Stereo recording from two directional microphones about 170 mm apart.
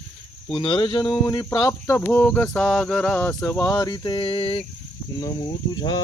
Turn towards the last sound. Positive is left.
turn(degrees=25)  # may be behind; listen again after turning